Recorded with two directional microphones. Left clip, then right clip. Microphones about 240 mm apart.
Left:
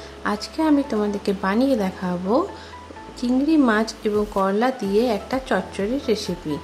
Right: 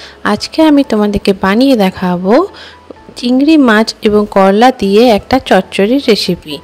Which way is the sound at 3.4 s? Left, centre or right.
Right.